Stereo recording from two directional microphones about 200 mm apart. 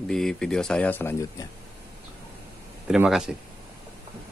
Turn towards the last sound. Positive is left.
turn(degrees=-5)  # may be behind; listen again after turning